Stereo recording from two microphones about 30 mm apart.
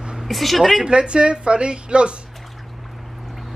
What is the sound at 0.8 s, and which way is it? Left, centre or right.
A woman's voice, right.